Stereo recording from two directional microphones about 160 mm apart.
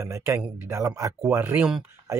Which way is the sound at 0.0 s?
15° right (ahead or behind).